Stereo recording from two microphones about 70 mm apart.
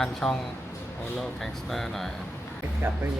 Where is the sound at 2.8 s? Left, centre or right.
Right.